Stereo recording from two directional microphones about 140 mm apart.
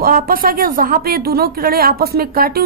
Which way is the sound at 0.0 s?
85° right.